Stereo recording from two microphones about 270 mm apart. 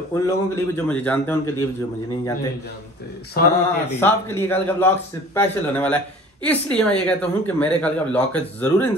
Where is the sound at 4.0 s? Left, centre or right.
Centre.